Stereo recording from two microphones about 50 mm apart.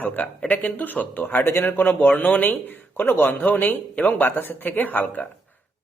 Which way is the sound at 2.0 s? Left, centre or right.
Left.